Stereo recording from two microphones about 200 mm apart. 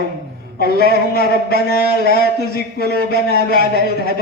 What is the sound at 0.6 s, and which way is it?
Speech, 50° left (ahead or behind).